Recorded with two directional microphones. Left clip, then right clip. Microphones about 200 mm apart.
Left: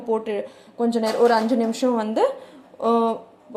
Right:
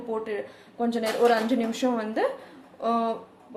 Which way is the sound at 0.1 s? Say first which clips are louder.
Left 7 dB; 30° left (ahead or behind).